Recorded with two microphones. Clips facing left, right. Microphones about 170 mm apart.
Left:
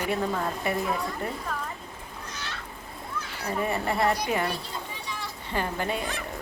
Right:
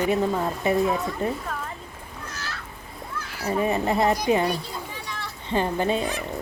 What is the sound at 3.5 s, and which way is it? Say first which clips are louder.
Speech: right 5 dB; 20° right (ahead or behind).